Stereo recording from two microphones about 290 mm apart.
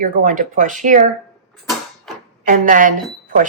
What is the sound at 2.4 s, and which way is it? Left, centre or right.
Speech, right.